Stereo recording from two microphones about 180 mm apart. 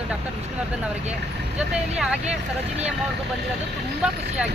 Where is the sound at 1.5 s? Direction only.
5° right (ahead or behind).